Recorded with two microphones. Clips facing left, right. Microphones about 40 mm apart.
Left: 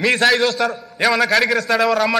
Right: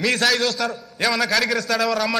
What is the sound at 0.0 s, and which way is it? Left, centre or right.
A man's voice, centre.